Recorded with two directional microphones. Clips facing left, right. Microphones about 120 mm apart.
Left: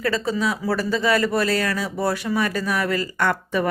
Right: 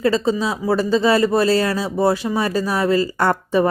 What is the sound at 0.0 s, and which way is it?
A woman's voice, 25° right (ahead or behind).